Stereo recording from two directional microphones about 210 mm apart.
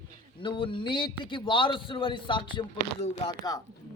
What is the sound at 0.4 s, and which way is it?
A man's voice, 25° left (ahead or behind).